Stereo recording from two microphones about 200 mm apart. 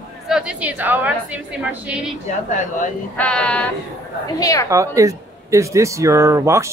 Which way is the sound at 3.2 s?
5° left (ahead or behind).